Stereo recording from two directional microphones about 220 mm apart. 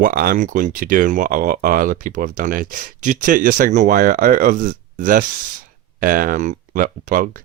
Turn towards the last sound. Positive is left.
turn(degrees=-40)  # may be behind; listen again after turning